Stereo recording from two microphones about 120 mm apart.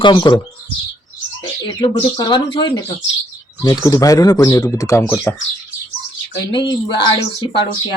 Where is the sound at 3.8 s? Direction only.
30° left (ahead or behind).